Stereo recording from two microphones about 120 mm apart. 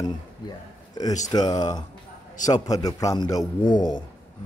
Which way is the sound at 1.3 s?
35° left (ahead or behind).